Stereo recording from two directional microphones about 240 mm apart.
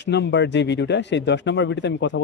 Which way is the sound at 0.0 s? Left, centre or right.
Left.